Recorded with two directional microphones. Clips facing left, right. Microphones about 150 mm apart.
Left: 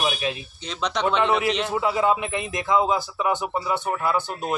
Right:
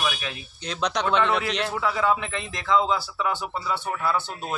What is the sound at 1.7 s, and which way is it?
A man's voice, 20° left (ahead or behind).